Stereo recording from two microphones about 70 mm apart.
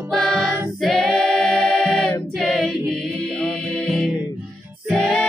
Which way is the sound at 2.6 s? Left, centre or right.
Centre.